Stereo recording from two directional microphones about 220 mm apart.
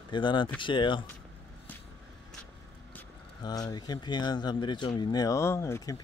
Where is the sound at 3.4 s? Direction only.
20° left (ahead or behind).